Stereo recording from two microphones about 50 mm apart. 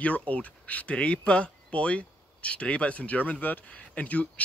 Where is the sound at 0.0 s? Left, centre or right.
Left.